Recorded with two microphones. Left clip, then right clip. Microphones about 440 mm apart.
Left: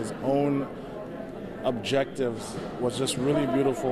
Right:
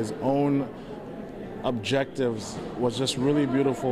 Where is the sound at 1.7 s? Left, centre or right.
Right.